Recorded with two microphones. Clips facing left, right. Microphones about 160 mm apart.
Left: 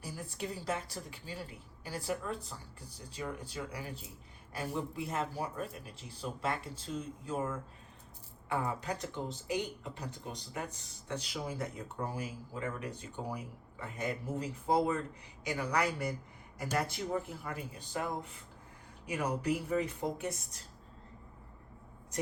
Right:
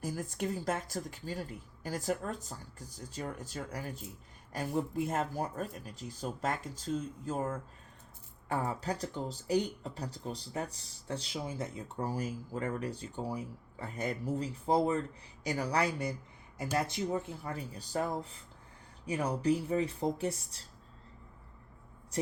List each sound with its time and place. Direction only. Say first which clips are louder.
0.0 s speech: right 5 dB; 45° right (ahead or behind); by 11.6 s 25° right (ahead or behind)
12.0 s speech: right 5 dB; 40° right (ahead or behind)